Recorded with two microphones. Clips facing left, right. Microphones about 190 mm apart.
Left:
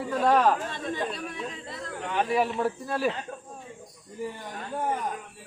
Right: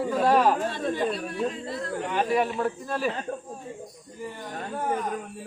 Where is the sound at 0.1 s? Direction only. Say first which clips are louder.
Even; 5° right (ahead or behind); by 3.1 s 10° left (ahead or behind).